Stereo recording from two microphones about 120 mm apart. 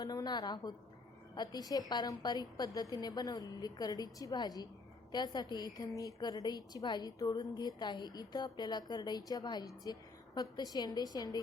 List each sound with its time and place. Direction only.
0.0 s a woman's voice: 35° left (ahead or behind)